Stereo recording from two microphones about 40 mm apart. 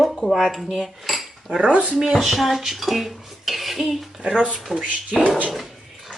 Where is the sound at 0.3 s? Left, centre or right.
Centre.